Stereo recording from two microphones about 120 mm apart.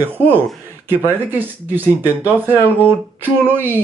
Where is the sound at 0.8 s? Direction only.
15° right (ahead or behind).